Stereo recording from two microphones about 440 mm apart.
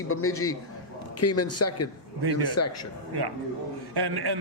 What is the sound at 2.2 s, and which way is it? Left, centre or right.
Speech, right.